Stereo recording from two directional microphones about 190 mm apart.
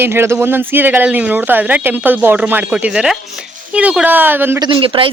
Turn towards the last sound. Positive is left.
turn(degrees=-30)  # may be behind; listen again after turning